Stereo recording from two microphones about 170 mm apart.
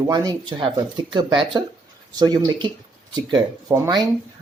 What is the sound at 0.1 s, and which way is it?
Speech, 25° right (ahead or behind).